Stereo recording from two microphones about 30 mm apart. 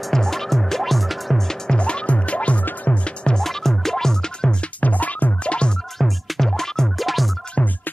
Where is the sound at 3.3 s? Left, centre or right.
Centre.